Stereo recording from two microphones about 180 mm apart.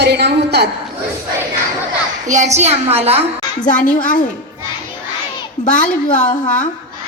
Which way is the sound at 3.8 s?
45° left (ahead or behind).